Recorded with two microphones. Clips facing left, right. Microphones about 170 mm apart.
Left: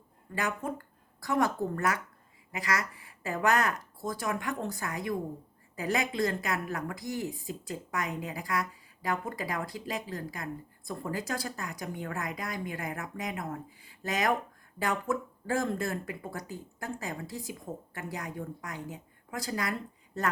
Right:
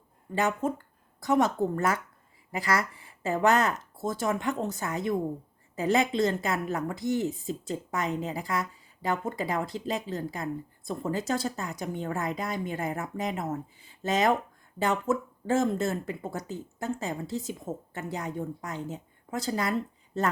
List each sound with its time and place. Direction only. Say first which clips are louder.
0.3 s speech: right 6 dB; 25° right (ahead or behind)